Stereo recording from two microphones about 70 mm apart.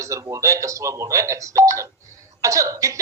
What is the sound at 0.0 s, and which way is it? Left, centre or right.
A man's voice, right.